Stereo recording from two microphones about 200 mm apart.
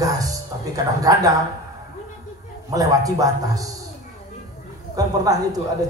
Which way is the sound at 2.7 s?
15° right (ahead or behind).